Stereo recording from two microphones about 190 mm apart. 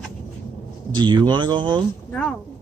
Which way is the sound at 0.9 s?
25° right (ahead or behind).